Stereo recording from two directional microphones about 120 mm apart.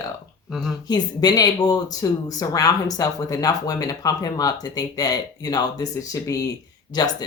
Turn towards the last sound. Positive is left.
turn(degrees=35)  # may be behind; listen again after turning